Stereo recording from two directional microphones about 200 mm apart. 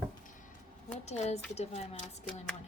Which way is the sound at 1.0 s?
35° left (ahead or behind).